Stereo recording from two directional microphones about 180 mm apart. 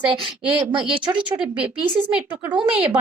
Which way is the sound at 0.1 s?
30° right (ahead or behind).